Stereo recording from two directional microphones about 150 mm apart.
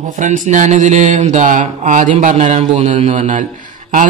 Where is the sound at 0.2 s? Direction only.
55° right (ahead or behind).